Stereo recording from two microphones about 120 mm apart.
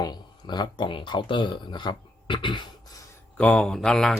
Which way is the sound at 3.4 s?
5° left (ahead or behind).